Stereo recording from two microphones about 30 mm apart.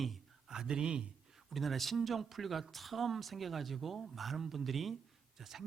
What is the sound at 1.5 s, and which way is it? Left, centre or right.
Speech, centre.